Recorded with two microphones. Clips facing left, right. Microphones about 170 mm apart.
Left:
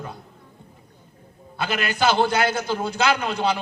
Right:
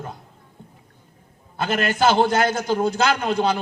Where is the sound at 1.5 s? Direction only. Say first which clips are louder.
Right 3 dB; 50° right (ahead or behind).